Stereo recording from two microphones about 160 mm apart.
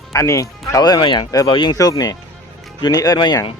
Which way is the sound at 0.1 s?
20° left (ahead or behind).